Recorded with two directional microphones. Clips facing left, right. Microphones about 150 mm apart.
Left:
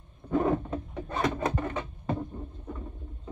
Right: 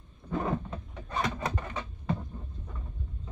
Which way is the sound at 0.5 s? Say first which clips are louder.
Left 5 dB; 50° left (ahead or behind).